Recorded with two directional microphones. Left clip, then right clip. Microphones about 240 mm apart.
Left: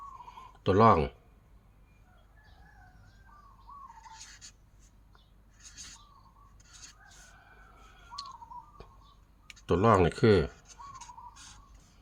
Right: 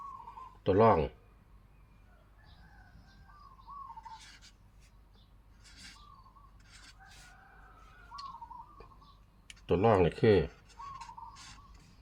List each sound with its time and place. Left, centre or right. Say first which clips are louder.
0.6 s speech: left 3 dB; left
9.6 s speech: left 2 dB; left